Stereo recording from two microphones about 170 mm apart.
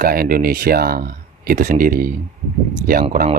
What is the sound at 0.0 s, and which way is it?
Speech, 60° right (ahead or behind).